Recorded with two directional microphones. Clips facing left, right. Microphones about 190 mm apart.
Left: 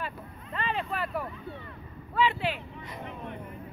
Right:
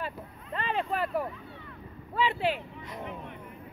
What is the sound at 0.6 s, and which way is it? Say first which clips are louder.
Vehicle: right 2 dB; 45° right (ahead or behind).